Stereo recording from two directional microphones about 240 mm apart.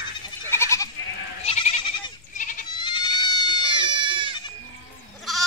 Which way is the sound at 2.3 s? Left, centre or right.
Left.